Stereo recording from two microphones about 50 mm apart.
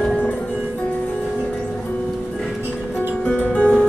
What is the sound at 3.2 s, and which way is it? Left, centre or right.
Music, left.